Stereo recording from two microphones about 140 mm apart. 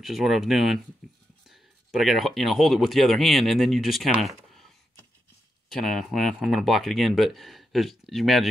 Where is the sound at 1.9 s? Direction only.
Centre (ahead or behind).